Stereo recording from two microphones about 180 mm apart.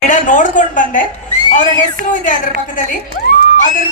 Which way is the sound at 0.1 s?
45° left (ahead or behind).